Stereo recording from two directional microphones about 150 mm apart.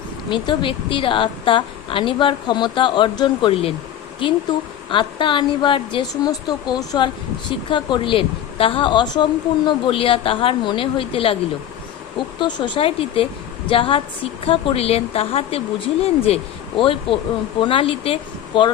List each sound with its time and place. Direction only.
0.3 s a woman's voice: 30° left (ahead or behind)
4.9 s a woman's voice: 35° left (ahead or behind)
12.4 s a woman's voice: 30° left (ahead or behind)